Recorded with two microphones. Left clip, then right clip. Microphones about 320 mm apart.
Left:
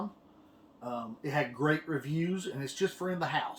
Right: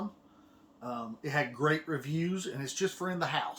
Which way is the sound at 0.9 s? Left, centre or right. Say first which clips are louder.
Left 1 dB; centre.